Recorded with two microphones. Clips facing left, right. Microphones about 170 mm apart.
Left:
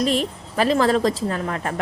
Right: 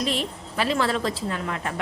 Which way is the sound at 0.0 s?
40° left (ahead or behind).